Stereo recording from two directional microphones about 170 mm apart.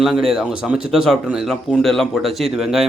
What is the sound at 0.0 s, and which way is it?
Speech, centre (ahead or behind).